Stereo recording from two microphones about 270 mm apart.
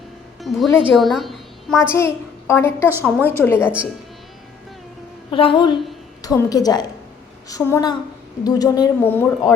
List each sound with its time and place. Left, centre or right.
0.4 s a woman's voice: centre
2.9 s a woman's voice: centre
3.2 s speech: centre
5.3 s a woman's voice: centre